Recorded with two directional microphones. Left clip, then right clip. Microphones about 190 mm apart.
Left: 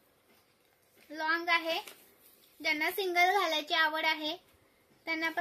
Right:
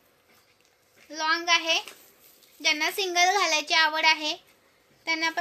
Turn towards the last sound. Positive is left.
turn(degrees=15)  # may be behind; listen again after turning